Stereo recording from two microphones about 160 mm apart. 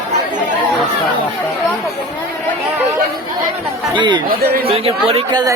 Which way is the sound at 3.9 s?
30° right (ahead or behind).